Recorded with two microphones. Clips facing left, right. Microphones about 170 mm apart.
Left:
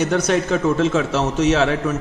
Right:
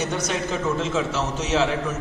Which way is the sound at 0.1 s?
65° left (ahead or behind).